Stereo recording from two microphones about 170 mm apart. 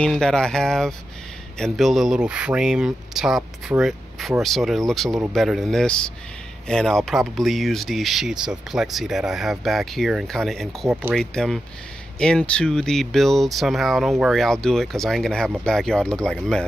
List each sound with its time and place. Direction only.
0.0 s speech: 5° left (ahead or behind)
10.9 s speech: 10° right (ahead or behind)
11.1 s speech: centre (ahead or behind)